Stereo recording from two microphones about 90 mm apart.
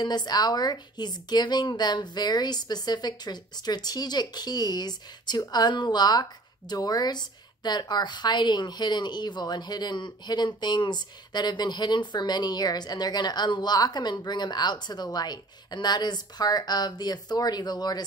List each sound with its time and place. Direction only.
0.0 s a woman's voice: 50° left (ahead or behind)